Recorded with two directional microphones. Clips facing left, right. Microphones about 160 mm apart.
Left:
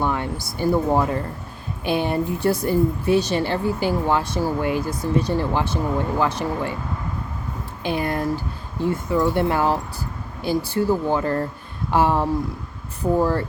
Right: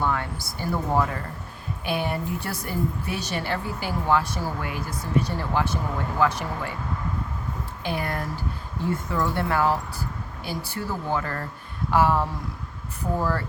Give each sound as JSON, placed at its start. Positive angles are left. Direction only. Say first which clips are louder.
{"t": 0.0, "sound": "a woman's voice", "louder": "left 3 dB", "side_deg": 20}
{"t": 7.9, "sound": "a woman's voice", "louder": "left 6 dB", "side_deg": 20}